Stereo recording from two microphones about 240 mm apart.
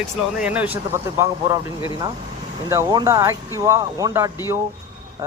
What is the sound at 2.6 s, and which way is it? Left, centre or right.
Speech, centre.